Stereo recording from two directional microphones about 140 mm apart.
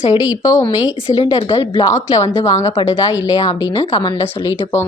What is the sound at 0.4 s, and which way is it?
A woman's voice, 25° left (ahead or behind).